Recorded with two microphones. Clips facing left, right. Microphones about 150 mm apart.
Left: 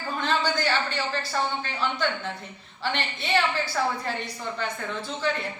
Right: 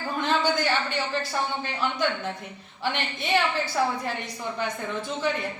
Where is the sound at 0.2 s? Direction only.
20° right (ahead or behind).